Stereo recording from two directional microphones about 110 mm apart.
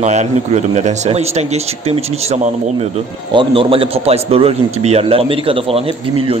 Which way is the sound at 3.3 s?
50° right (ahead or behind).